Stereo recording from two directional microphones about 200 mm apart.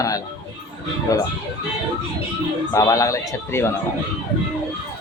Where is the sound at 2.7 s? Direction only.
15° left (ahead or behind).